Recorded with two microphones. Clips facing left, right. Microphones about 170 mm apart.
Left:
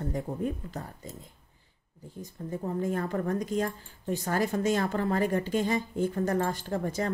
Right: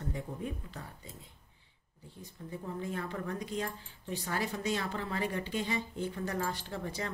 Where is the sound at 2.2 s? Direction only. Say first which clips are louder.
Left 8 dB; 45° left (ahead or behind).